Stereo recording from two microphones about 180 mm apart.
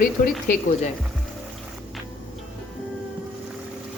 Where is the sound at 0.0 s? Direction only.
50° left (ahead or behind).